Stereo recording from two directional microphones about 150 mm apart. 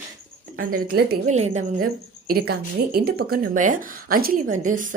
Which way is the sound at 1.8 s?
85° right.